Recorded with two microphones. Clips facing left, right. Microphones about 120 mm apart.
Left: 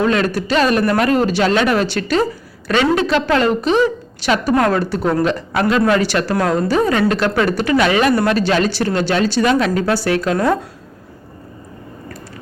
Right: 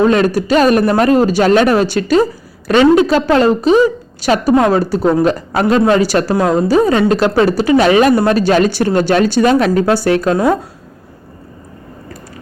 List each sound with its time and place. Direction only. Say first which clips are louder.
0.0 s a man's voice: right 5 dB; 35° right (ahead or behind)
4.5 s a woman's voice: right 4 dB; 20° right (ahead or behind)
4.8 s a man's voice: right 5 dB; 40° right (ahead or behind)
6.3 s a woman's voice: right 4 dB; 25° right (ahead or behind)
8.4 s speech: right 5 dB; 45° right (ahead or behind)
9.4 s a man's voice: right 4 dB; 40° right (ahead or behind)
10.3 s speech: right 3 dB; 15° right (ahead or behind)